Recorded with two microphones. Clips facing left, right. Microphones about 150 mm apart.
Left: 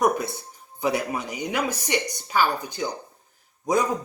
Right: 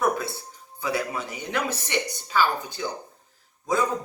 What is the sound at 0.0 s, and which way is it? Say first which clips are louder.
Music: left 2 dB; 20° left (ahead or behind).